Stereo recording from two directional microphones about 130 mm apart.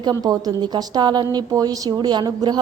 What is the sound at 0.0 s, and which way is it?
A woman's voice, 30° right (ahead or behind).